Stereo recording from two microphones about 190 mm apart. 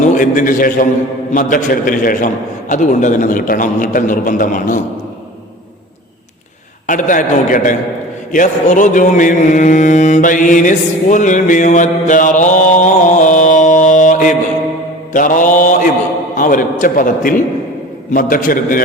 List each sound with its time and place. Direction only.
0.1 s a man's voice: 45° left (ahead or behind)
6.8 s a man's voice: 45° left (ahead or behind)
8.3 s mantra: 40° left (ahead or behind)
16.3 s a man's voice: 45° left (ahead or behind)